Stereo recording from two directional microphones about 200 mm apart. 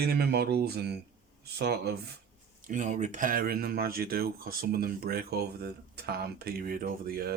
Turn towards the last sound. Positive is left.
turn(degrees=-45)  # may be behind; listen again after turning